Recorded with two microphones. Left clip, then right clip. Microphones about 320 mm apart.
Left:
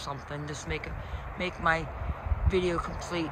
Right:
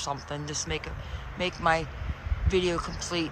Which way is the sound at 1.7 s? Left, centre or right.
Centre.